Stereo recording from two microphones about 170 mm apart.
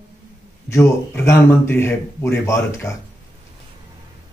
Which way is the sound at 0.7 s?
15° left (ahead or behind).